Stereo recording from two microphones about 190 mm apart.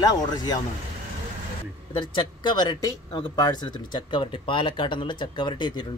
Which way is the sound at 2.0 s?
25° left (ahead or behind).